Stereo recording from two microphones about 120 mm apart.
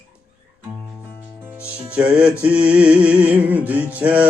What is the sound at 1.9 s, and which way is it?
Music, 10° right (ahead or behind).